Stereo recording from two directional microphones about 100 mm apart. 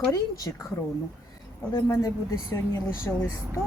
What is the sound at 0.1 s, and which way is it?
Speech, 35° left (ahead or behind).